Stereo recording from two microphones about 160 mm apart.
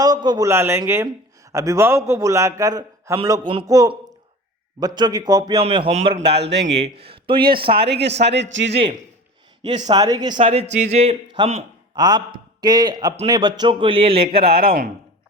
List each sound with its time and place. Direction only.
0.0 s a man's voice: 25° right (ahead or behind)
5.6 s speech: 35° right (ahead or behind)
6.3 s a man's voice: 90° right
7.0 s speech: 35° right (ahead or behind)
7.8 s a man's voice: 90° right
8.7 s speech: 40° right (ahead or behind)
9.9 s speech: 25° right (ahead or behind); by 11.2 s 40° right (ahead or behind)
11.3 s a man's voice: 30° right (ahead or behind)
14.2 s speech: 65° right (ahead or behind)